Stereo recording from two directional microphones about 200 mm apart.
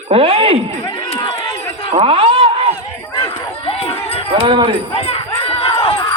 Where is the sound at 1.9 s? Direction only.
30° right (ahead or behind).